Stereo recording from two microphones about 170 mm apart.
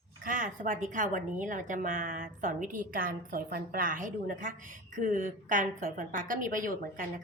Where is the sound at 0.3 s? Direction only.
50° right (ahead or behind).